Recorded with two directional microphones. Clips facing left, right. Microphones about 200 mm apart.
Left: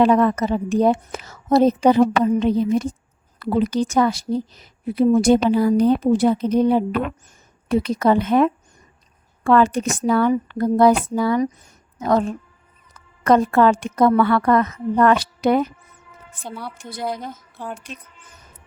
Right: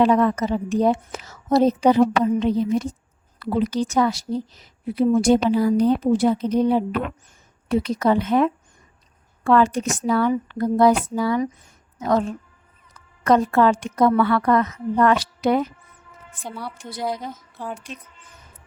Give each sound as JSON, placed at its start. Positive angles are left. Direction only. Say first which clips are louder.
{"t": 0.0, "sound": "a woman's voice", "louder": "left 2 dB", "side_deg": 55}
{"t": 13.2, "sound": "a woman's voice", "louder": "left 2 dB", "side_deg": 55}
{"t": 16.4, "sound": "a woman's voice", "louder": "even", "side_deg": 0}